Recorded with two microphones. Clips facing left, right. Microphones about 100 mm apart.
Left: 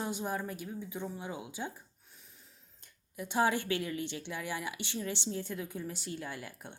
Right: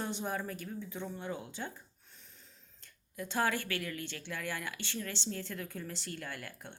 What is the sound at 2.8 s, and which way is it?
A woman's voice, 15° left (ahead or behind).